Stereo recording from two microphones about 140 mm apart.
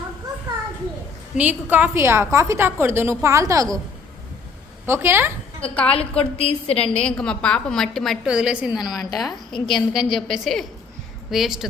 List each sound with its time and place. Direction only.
1.4 s a woman's voice: 10° right (ahead or behind)
4.9 s a woman's voice: 15° right (ahead or behind)
5.6 s a woman's voice: 10° left (ahead or behind)
5.9 s a woman's voice: 45° left (ahead or behind)
6.7 s a woman's voice: 5° left (ahead or behind)